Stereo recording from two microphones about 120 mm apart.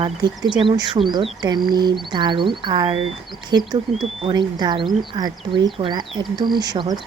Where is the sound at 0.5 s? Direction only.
35° right (ahead or behind).